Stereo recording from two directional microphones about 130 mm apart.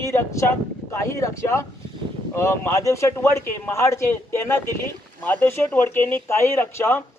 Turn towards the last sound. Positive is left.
turn(degrees=20)  # may be behind; listen again after turning